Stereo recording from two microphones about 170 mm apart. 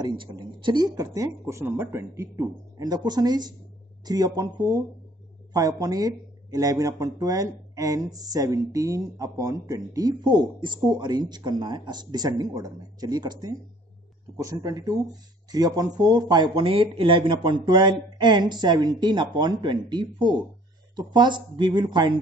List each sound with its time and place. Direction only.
0.0 s speech: 30° right (ahead or behind)